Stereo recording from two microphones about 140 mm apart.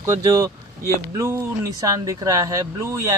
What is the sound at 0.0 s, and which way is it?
Speech, 25° right (ahead or behind).